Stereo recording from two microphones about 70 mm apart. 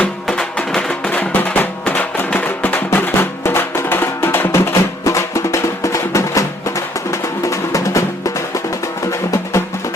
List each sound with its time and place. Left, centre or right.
0.3 s music: centre
1.1 s music: left
2.9 s music: left
9.3 s music: left